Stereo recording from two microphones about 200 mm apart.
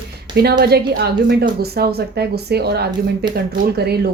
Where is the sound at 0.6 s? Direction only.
50° right (ahead or behind).